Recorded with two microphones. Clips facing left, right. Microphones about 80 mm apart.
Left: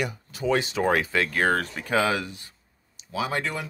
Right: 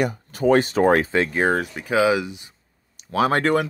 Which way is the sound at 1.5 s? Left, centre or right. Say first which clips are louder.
Right 2 dB; centre.